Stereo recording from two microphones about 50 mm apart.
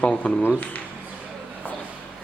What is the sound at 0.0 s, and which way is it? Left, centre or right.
Speech, left.